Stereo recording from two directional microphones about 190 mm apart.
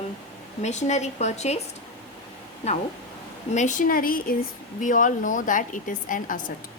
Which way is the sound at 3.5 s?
40° left (ahead or behind).